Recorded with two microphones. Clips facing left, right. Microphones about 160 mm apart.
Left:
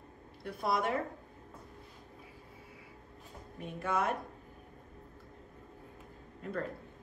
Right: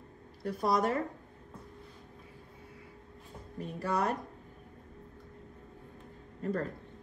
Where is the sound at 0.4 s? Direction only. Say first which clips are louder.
Right 4 dB; 40° right (ahead or behind).